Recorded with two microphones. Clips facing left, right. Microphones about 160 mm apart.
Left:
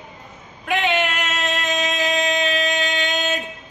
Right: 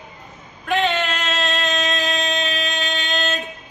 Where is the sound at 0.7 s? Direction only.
15° left (ahead or behind).